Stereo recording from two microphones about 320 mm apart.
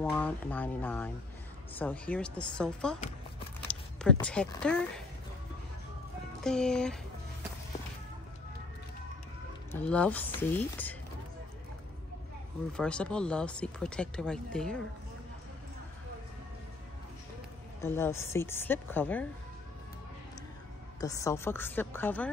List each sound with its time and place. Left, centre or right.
0.0 s speech: centre
6.4 s speech: centre
9.7 s speech: centre
12.7 s speech: centre
17.8 s a woman's voice: centre
21.0 s a woman's voice: centre